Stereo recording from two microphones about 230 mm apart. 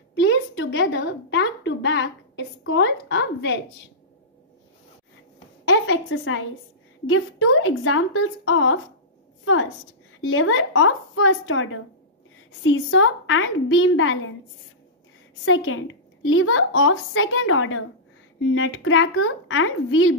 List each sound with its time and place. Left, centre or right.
0.1 s a woman's voice: left
5.7 s a woman's voice: left
15.4 s a woman's voice: left